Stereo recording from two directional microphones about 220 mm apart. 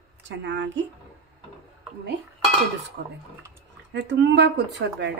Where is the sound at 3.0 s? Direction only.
50° right (ahead or behind).